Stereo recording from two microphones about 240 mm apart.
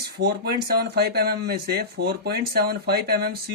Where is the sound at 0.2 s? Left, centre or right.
Right.